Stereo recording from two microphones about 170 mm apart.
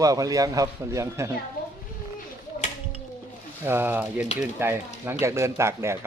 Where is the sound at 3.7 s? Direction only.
10° right (ahead or behind).